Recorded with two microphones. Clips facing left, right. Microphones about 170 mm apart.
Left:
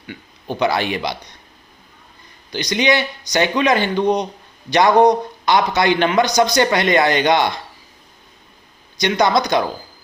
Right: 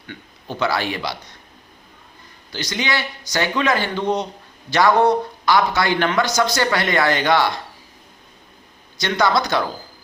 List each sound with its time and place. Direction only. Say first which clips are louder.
0.1 s speech: left 4 dB; 15° left (ahead or behind)
2.5 s a man's voice: left 7 dB; 15° left (ahead or behind)
9.0 s speech: left 3 dB; 15° left (ahead or behind)